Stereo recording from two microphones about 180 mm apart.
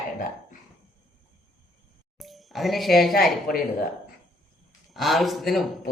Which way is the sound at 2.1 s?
Centre (ahead or behind).